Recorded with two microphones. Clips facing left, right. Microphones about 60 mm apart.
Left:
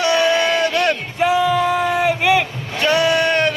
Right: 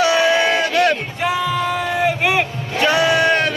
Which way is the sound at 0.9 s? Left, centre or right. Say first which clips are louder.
Left 1 dB; centre.